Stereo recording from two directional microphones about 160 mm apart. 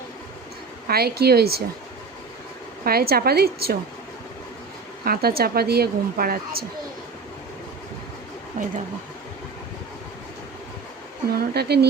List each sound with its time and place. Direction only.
0.9 s a woman's voice: 75° right (ahead or behind)
2.8 s a woman's voice: 70° right (ahead or behind)
5.0 s a woman's voice: 70° right (ahead or behind)
11.3 s a woman's voice: 80° right